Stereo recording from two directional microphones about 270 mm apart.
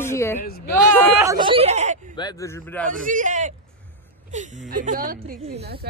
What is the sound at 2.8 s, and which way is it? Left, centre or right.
A woman's voice, right.